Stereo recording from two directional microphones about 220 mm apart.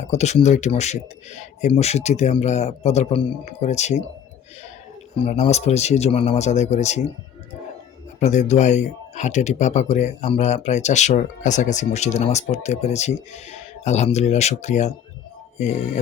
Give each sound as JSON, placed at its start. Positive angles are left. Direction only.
{"t": 0.1, "sound": "speech", "side_deg": 30}
{"t": 5.2, "sound": "speech", "side_deg": 30}
{"t": 8.2, "sound": "speech", "side_deg": 30}